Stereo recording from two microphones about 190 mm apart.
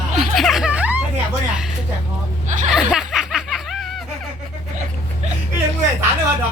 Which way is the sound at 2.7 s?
5° right (ahead or behind).